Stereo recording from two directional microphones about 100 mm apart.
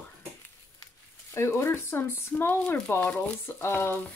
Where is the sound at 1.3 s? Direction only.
25° left (ahead or behind).